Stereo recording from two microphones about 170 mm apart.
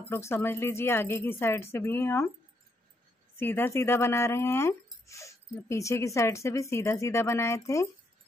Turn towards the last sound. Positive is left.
turn(degrees=15)  # may be behind; listen again after turning